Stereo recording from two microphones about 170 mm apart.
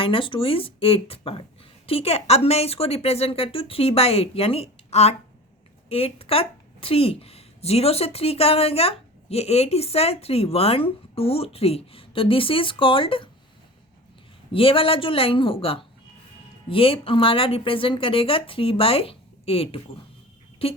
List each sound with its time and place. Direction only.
0.0 s a woman's voice: 30° left (ahead or behind)
14.5 s a woman's voice: 30° left (ahead or behind)